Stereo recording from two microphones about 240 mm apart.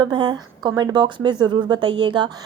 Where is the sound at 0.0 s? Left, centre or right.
Centre.